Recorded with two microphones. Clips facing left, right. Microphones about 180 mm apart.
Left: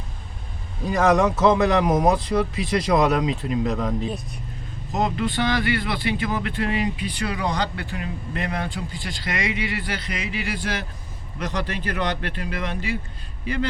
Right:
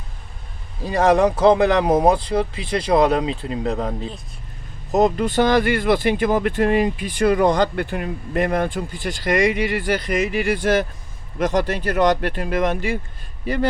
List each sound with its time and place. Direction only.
0.9 s speech: 30° right (ahead or behind)
4.9 s a man's voice: 40° right (ahead or behind)